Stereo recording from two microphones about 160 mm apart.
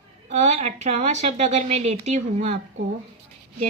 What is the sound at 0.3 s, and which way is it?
A woman's voice, 45° right (ahead or behind).